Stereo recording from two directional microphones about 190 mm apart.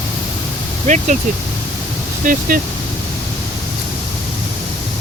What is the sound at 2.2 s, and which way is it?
Speech, 45° right (ahead or behind).